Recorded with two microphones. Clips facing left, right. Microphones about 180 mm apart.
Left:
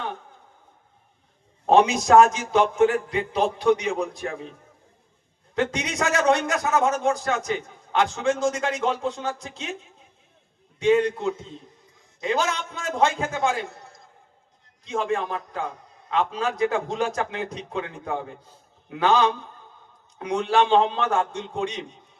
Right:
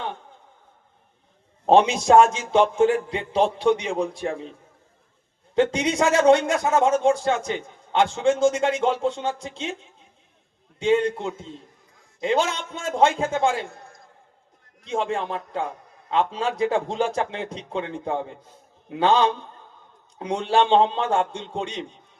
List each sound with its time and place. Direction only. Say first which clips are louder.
1.6 s a man's voice: right 1 dB; 30° right (ahead or behind)
5.5 s a man's voice: right 5 dB; 30° right (ahead or behind)
10.8 s a man's voice: left 1 dB; 30° right (ahead or behind)
14.8 s a man's voice: even; 30° right (ahead or behind)